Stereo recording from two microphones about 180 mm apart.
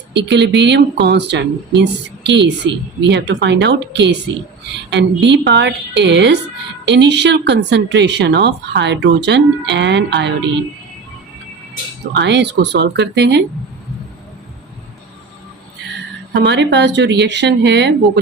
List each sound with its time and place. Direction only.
0.2 s speech: 75° right (ahead or behind)
12.1 s speech: 70° right (ahead or behind)
16.3 s speech: 75° right (ahead or behind)